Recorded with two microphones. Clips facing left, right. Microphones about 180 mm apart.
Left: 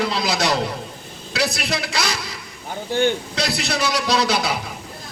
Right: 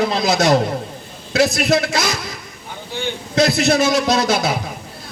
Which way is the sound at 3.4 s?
50° right (ahead or behind).